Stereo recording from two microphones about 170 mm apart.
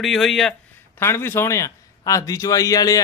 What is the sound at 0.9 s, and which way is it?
A man's voice, 15° left (ahead or behind).